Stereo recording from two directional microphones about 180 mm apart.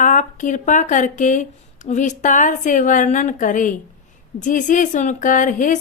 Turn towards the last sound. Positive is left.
turn(degrees=45)  # may be behind; listen again after turning